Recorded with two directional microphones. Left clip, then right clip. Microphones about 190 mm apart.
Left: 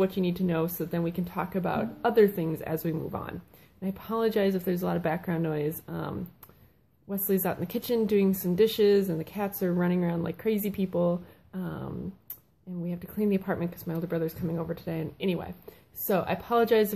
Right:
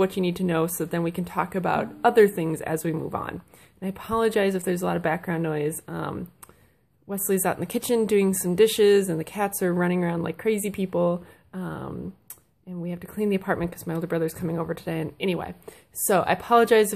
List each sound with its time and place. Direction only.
0.0 s speech: 25° right (ahead or behind)